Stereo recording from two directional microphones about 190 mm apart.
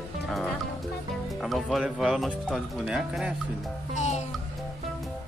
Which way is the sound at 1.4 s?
Centre (ahead or behind).